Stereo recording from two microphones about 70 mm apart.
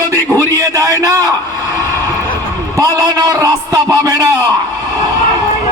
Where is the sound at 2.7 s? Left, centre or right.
Right.